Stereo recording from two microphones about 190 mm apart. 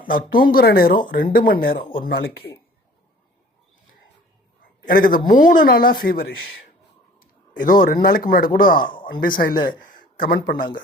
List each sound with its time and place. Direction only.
0.1 s a man's voice: 50° left (ahead or behind)
1.8 s speech: 25° left (ahead or behind)
2.0 s speech: 55° left (ahead or behind)
4.9 s a man's voice: 50° left (ahead or behind)
8.8 s speech: 25° left (ahead or behind)
9.4 s a man's voice: 50° left (ahead or behind)